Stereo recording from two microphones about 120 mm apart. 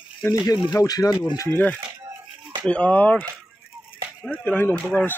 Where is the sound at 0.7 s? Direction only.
30° left (ahead or behind).